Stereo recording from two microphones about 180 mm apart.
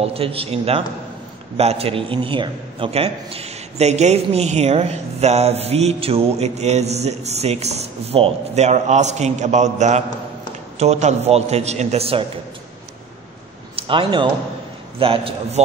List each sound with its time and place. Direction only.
0.0 s a man's voice: 30° right (ahead or behind)
13.7 s a man's voice: 30° right (ahead or behind)